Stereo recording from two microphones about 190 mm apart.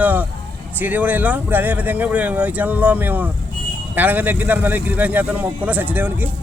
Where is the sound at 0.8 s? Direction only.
10° right (ahead or behind).